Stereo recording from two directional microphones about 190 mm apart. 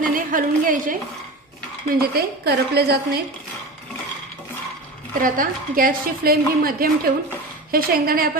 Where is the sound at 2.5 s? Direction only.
55° right (ahead or behind).